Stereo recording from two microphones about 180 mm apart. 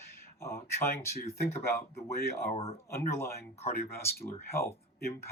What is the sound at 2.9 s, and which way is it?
Speech, 15° left (ahead or behind).